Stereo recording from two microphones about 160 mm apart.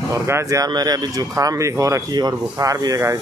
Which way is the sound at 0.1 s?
15° right (ahead or behind).